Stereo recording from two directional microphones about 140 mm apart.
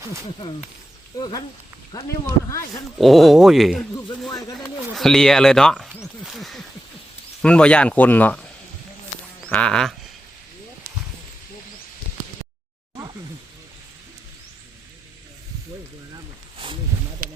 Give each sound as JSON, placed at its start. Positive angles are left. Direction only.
{"t": 0.0, "sound": "speech", "side_deg": -20}
{"t": 1.9, "sound": "speech", "side_deg": 30}
{"t": 3.0, "sound": "speech", "side_deg": 0}
{"t": 4.9, "sound": "speech", "side_deg": 5}
{"t": 6.2, "sound": "a sound", "side_deg": 0}
{"t": 7.4, "sound": "speech", "side_deg": 5}
{"t": 9.5, "sound": "speech", "side_deg": 5}